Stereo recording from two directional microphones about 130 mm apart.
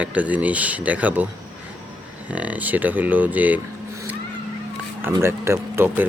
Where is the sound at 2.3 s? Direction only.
10° right (ahead or behind).